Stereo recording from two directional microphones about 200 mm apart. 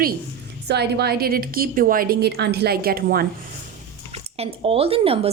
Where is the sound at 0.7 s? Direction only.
55° right (ahead or behind).